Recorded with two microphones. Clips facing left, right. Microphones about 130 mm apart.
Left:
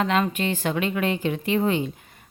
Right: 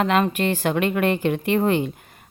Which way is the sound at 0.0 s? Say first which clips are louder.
Right 3 dB; 55° right (ahead or behind).